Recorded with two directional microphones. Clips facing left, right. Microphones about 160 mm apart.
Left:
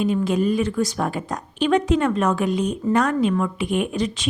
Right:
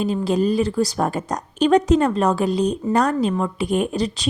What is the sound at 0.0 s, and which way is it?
A woman's voice, 35° right (ahead or behind).